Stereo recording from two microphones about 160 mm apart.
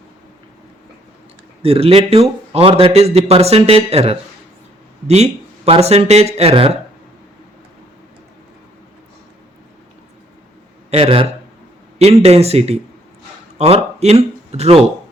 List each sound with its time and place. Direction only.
1.6 s a man's voice: 35° right (ahead or behind)
10.9 s a man's voice: 40° right (ahead or behind)